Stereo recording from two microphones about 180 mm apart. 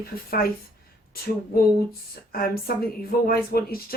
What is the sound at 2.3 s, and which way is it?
A woman's voice, 55° left (ahead or behind).